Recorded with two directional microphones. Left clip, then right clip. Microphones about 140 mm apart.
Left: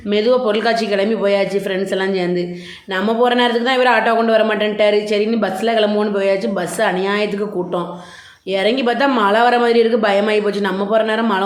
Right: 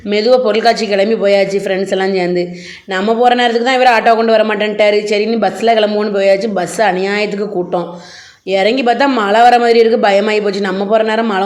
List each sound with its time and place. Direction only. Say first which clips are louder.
0.1 s a man's voice: right 4 dB; 20° right (ahead or behind)